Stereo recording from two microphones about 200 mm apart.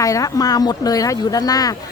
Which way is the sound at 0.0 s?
15° left (ahead or behind).